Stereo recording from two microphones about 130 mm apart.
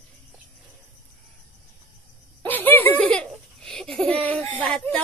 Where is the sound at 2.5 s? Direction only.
15° left (ahead or behind).